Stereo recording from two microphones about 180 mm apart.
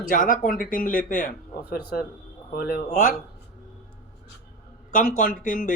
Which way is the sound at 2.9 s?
45° left (ahead or behind).